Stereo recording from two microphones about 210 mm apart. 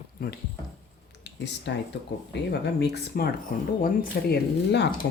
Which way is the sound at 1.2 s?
55° left (ahead or behind).